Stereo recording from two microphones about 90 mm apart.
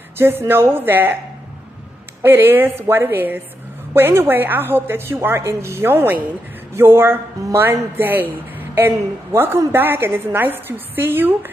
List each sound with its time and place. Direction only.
0.2 s a woman's voice: 25° right (ahead or behind)
2.2 s a woman's voice: 25° right (ahead or behind)